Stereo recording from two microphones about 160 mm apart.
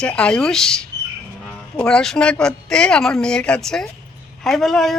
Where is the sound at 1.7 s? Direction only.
5° left (ahead or behind).